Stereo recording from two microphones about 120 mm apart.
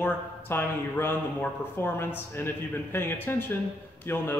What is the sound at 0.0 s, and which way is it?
A man's voice, 20° left (ahead or behind).